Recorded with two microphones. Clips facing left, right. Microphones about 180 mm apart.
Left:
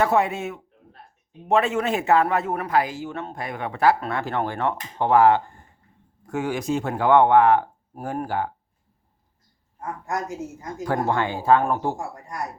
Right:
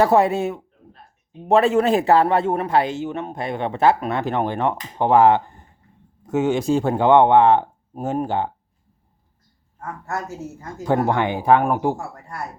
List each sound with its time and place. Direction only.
0.0 s a man's voice: 35° right (ahead or behind)
9.8 s a woman's voice: 15° left (ahead or behind)
10.8 s speech: 20° right (ahead or behind)
11.9 s a woman's voice: 15° left (ahead or behind)